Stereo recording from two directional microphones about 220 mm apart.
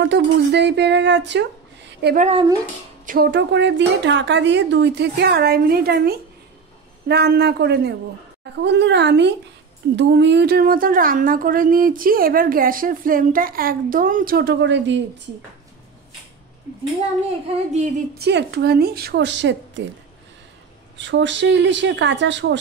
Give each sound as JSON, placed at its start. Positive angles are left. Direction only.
{"t": 0.0, "sound": "speech", "side_deg": -50}
{"t": 2.1, "sound": "speech", "side_deg": -30}
{"t": 3.1, "sound": "a woman's voice", "side_deg": -45}
{"t": 17.7, "sound": "a woman's voice", "side_deg": -40}
{"t": 21.0, "sound": "a woman's voice", "side_deg": -55}